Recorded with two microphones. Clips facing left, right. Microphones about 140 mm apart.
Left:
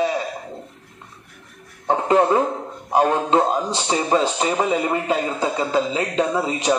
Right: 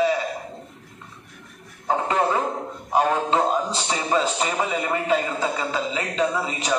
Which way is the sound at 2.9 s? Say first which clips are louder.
Left 3 dB; 35° left (ahead or behind).